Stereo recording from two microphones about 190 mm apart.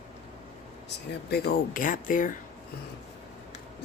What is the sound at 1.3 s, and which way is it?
Speech, 50° left (ahead or behind).